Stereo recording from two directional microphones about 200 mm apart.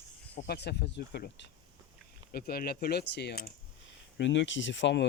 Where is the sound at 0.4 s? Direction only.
55° left (ahead or behind).